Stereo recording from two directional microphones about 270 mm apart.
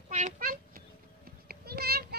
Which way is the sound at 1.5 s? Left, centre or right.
Right.